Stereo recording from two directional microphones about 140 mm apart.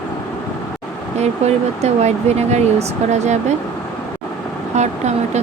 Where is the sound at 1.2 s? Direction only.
50° right (ahead or behind).